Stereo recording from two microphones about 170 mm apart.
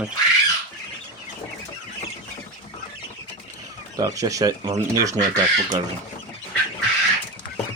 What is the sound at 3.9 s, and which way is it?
Speech, 20° right (ahead or behind).